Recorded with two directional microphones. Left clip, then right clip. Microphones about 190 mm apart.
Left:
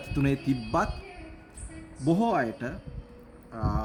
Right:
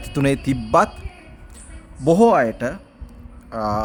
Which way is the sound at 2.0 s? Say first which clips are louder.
Right 12 dB; 65° right (ahead or behind).